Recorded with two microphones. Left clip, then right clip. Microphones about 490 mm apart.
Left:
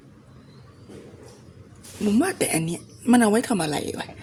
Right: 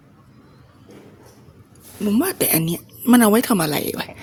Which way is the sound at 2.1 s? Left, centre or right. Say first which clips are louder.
Right 2 dB; right.